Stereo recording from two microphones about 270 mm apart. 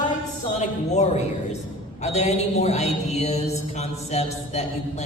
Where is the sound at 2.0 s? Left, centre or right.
Left.